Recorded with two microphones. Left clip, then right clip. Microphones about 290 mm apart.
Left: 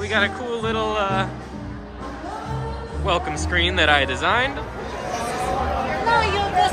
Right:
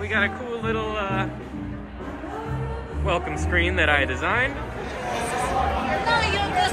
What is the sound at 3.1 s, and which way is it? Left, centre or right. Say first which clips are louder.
Speech: left 2 dB; centre.